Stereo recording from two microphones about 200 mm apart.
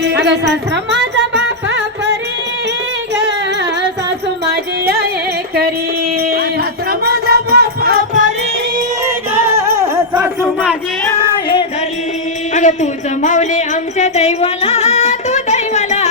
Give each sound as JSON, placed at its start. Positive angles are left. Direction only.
{"t": 0.0, "sound": "music", "side_deg": -60}
{"t": 7.0, "sound": "music", "side_deg": -50}
{"t": 9.3, "sound": "music", "side_deg": -15}
{"t": 10.4, "sound": "a sound", "side_deg": 0}
{"t": 12.5, "sound": "speech", "side_deg": 40}
{"t": 14.0, "sound": "music", "side_deg": 35}